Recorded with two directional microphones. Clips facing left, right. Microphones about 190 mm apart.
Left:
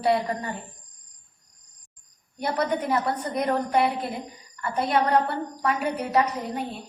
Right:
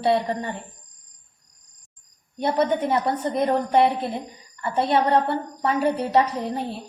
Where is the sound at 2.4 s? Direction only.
25° right (ahead or behind).